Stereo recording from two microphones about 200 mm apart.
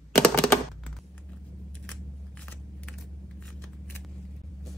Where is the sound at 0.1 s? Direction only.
5° left (ahead or behind).